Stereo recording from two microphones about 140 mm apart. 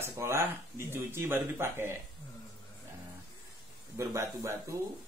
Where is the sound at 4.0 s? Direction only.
20° right (ahead or behind).